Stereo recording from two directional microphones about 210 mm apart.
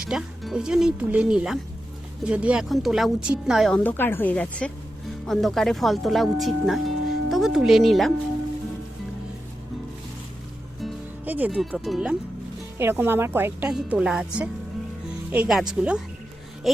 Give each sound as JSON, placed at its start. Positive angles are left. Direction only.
{"t": 0.0, "sound": "a woman's voice", "side_deg": -5}
{"t": 10.8, "sound": "music", "side_deg": -5}
{"t": 12.8, "sound": "a woman's voice", "side_deg": -10}